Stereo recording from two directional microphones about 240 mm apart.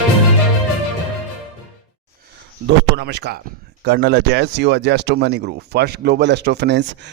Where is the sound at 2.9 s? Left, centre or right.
Right.